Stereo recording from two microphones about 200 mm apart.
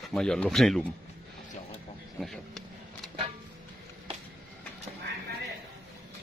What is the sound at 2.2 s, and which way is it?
Vehicle, centre (ahead or behind).